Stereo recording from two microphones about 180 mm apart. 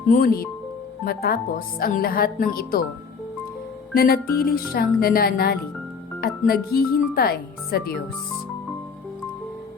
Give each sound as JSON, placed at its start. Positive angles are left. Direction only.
{"t": 0.1, "sound": "speech", "side_deg": 55}
{"t": 3.9, "sound": "speech", "side_deg": 55}